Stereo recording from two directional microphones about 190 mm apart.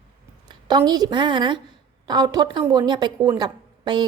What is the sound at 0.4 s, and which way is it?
A woman's voice, 20° right (ahead or behind).